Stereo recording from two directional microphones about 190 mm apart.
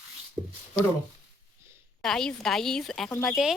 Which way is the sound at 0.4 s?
25° right (ahead or behind).